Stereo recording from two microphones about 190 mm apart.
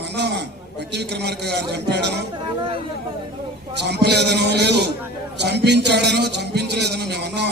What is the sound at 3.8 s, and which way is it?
Music, 60° right (ahead or behind).